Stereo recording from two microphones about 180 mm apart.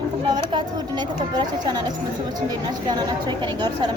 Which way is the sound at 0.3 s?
25° right (ahead or behind).